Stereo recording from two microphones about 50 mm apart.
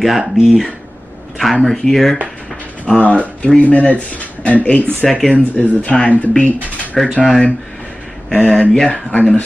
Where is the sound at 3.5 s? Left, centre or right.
Left.